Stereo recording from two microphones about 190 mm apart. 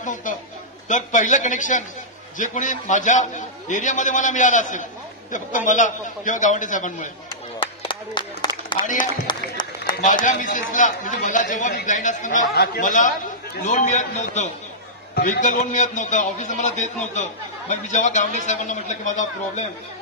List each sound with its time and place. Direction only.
0.0 s a man's voice: 45° left (ahead or behind)
7.6 s a sound: 25° left (ahead or behind)
8.8 s a man's voice: 20° right (ahead or behind)
9.3 s music: 20° left (ahead or behind)
10.0 s a man's voice: 40° left (ahead or behind)